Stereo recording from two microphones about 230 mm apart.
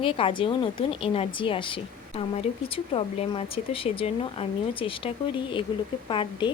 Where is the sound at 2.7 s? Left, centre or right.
Left.